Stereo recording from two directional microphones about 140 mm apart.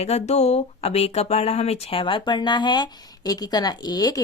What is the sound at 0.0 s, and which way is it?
Speech, 50° left (ahead or behind).